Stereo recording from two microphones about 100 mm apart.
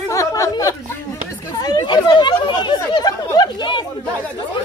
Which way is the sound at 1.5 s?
45° left (ahead or behind).